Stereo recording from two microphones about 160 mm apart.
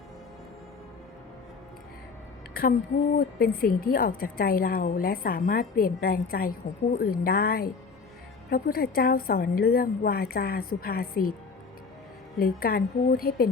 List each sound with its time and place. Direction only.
3.2 s a woman's voice: 70° left (ahead or behind)
12.4 s a woman's voice: 65° left (ahead or behind)